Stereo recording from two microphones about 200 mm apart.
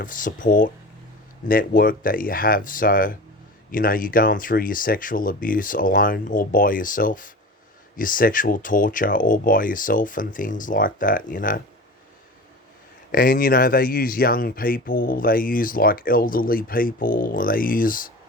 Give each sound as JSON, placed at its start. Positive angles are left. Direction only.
{"t": 0.0, "sound": "speech", "side_deg": 40}
{"t": 13.1, "sound": "speech", "side_deg": 45}